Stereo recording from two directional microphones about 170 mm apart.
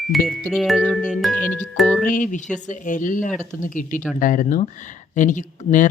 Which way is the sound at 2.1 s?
50° left (ahead or behind).